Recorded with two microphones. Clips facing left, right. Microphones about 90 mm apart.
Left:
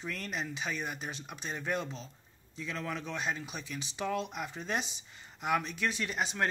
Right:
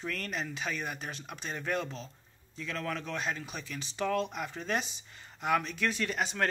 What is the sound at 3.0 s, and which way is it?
Speech, 5° left (ahead or behind).